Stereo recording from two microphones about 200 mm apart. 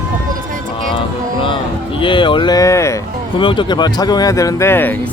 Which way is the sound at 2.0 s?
25° left (ahead or behind).